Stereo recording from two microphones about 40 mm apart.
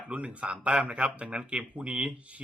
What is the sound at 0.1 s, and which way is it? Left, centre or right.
Speech, right.